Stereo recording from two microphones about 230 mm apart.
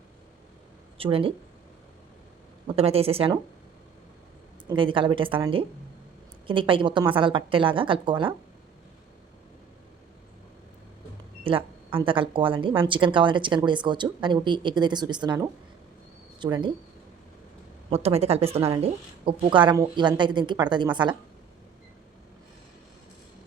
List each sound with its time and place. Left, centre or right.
0.9 s speech: right
2.6 s speech: right
4.7 s speech: right
11.4 s speech: right
17.8 s speech: right